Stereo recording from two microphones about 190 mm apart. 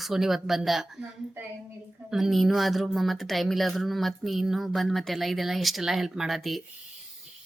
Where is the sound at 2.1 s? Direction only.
Centre (ahead or behind).